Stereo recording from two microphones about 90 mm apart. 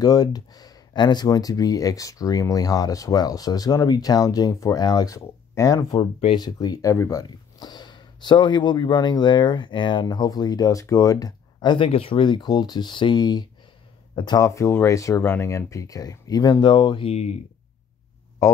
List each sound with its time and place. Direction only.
0.0 s speech: 45° left (ahead or behind)
5.9 s speech: 90° left
6.3 s speech: 50° left (ahead or behind)
7.2 s speech: 50° left (ahead or behind)
14.4 s speech: 35° left (ahead or behind); by 17.1 s 60° left (ahead or behind)